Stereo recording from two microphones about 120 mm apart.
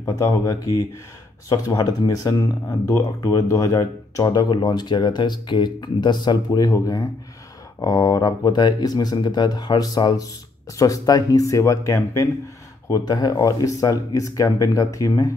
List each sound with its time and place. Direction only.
0.0 s speech: 30° left (ahead or behind)